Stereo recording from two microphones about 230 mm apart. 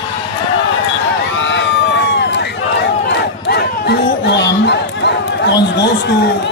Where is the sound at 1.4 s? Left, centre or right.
Left.